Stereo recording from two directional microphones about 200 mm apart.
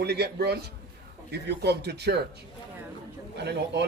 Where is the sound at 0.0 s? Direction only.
55° right (ahead or behind).